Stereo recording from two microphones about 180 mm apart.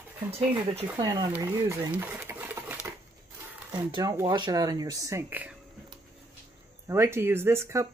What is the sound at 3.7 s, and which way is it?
Speech, 20° right (ahead or behind).